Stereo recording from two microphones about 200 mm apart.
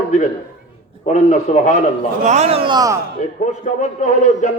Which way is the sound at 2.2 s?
35° right (ahead or behind).